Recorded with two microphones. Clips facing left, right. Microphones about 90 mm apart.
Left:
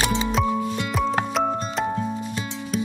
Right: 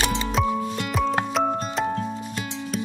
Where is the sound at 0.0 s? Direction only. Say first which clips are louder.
Left 2 dB; 15° left (ahead or behind).